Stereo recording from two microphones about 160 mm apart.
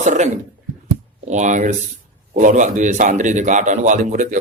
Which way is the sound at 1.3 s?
50° right (ahead or behind).